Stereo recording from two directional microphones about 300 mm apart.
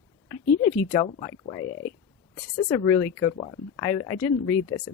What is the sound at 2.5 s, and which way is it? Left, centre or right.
Speech, centre.